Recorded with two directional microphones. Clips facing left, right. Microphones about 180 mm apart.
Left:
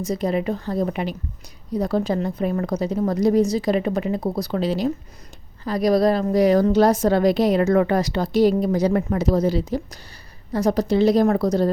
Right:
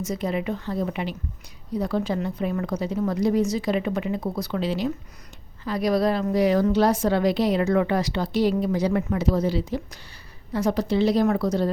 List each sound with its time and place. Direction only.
0.0 s a woman's voice: 35° left (ahead or behind)